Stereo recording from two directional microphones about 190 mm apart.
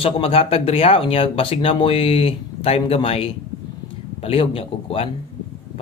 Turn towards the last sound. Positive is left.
turn(degrees=30)  # may be behind; listen again after turning